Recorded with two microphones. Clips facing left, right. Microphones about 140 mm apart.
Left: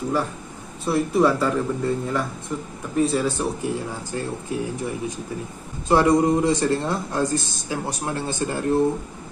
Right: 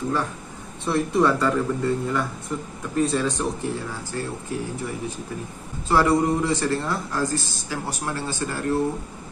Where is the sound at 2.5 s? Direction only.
5° left (ahead or behind).